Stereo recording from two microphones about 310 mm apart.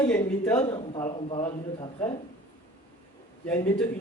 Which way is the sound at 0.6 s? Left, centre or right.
Centre.